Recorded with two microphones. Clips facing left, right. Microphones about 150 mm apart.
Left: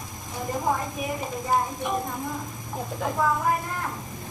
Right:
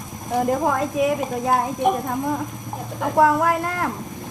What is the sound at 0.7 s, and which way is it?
A woman's voice, 90° right.